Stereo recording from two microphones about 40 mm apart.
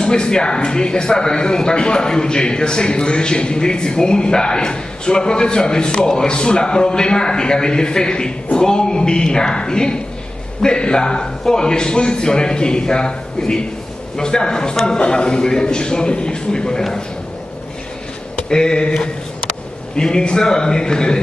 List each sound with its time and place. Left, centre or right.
0.0 s a man's voice: left
18.5 s a man's voice: centre